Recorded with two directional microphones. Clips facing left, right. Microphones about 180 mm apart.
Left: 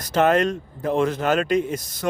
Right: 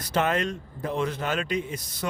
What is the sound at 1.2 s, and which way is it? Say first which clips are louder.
Speech: left 8 dB; 60° left (ahead or behind).